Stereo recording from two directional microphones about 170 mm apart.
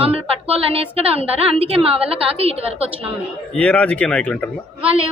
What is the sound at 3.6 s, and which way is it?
Speech, 5° left (ahead or behind).